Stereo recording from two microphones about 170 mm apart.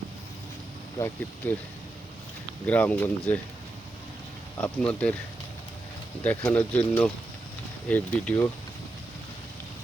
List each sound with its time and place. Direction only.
0.9 s speech: 15° left (ahead or behind)
2.6 s speech: 10° left (ahead or behind)
4.9 s speech: 5° left (ahead or behind)
6.2 s speech: 10° left (ahead or behind)